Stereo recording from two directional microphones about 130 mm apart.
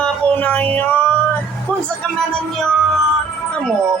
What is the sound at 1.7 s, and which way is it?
Music, 10° left (ahead or behind).